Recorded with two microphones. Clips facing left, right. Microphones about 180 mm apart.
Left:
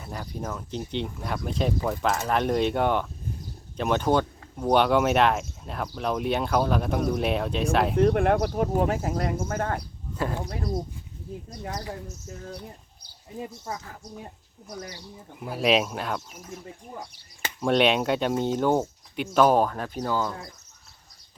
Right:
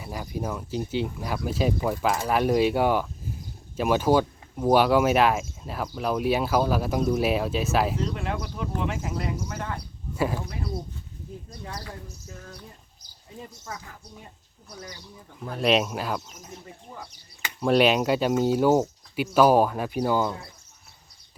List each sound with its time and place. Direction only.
0.0 s speech: 5° right (ahead or behind)
7.9 s speech: 60° left (ahead or behind)
8.8 s speech: 40° left (ahead or behind)
10.2 s speech: 10° right (ahead or behind)
15.4 s speech: 5° left (ahead or behind)
17.6 s speech: 5° right (ahead or behind)